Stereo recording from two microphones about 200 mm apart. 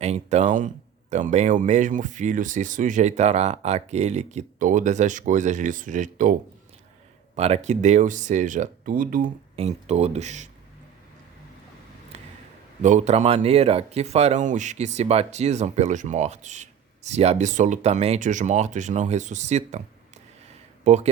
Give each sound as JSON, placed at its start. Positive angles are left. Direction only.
{"t": 0.0, "sound": "a sound", "side_deg": -35}
{"t": 1.1, "sound": "speech", "side_deg": -35}
{"t": 7.3, "sound": "speech", "side_deg": -30}
{"t": 9.6, "sound": "speech", "side_deg": -30}
{"t": 12.1, "sound": "a sound", "side_deg": -30}
{"t": 12.8, "sound": "speech", "side_deg": -35}
{"t": 20.8, "sound": "speech", "side_deg": -35}